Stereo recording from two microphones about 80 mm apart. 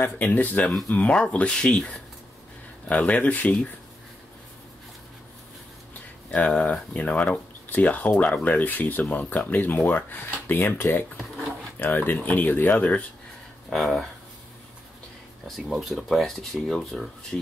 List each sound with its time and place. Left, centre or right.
0.0 s speech: left
6.3 s speech: centre
13.7 s speech: centre
15.4 s speech: centre